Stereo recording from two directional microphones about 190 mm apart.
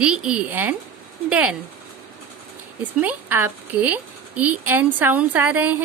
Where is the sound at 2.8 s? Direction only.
10° right (ahead or behind).